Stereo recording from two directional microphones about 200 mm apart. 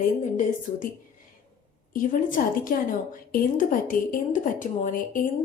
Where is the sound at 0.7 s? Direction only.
45° left (ahead or behind).